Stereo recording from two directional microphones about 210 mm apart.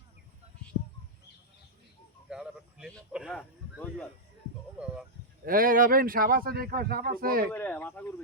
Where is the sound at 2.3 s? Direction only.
Centre (ahead or behind).